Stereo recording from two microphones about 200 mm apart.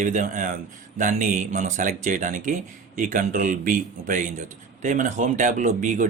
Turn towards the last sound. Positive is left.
turn(degrees=-40)  # may be behind; listen again after turning